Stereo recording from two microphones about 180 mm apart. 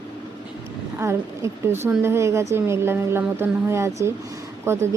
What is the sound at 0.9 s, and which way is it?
A woman's voice, 15° right (ahead or behind).